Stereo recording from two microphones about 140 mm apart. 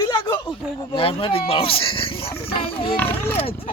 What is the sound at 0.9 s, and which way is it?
Speech, 40° left (ahead or behind).